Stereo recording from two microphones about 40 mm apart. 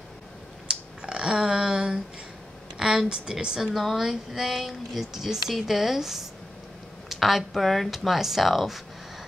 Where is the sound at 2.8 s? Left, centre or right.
Centre.